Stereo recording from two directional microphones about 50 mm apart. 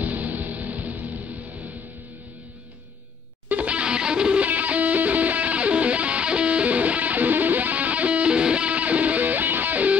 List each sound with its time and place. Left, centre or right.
0.0 s music: right
3.4 s music: right
4.5 s music: right